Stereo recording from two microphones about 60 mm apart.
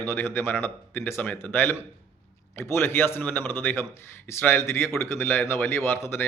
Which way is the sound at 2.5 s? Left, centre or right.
Left.